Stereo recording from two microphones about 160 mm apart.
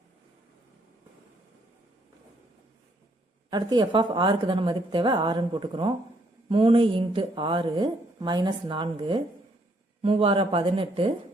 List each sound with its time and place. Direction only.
3.5 s a woman's voice: 30° right (ahead or behind)